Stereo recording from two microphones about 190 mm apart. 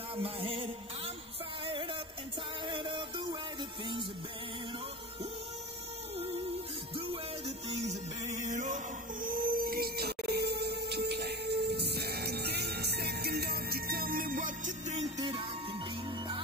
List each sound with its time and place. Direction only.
0.1 s music: 30° right (ahead or behind)
2.7 s music: 25° right (ahead or behind)
7.1 s music: 30° right (ahead or behind)
15.1 s music: 25° right (ahead or behind)